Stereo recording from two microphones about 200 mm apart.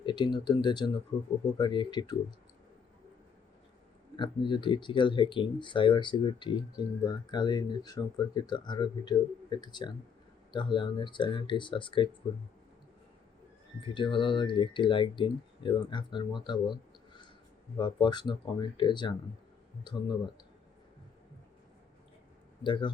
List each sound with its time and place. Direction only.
0.0 s speech: 25° left (ahead or behind)
4.2 s speech: 25° left (ahead or behind)
13.9 s speech: 25° left (ahead or behind)
17.7 s speech: 25° left (ahead or behind)
22.6 s speech: 25° left (ahead or behind)